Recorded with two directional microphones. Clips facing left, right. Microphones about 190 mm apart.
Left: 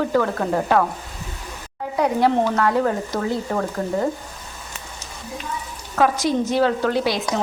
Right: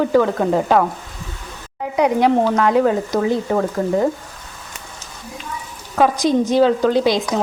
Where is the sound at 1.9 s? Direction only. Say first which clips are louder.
Right 3 dB; 15° right (ahead or behind).